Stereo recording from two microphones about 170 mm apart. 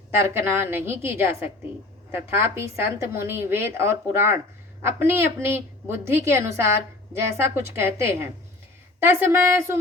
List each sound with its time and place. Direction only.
0.2 s a woman's voice: 15° right (ahead or behind)